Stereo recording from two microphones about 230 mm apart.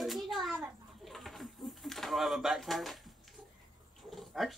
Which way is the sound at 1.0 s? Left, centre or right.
Centre.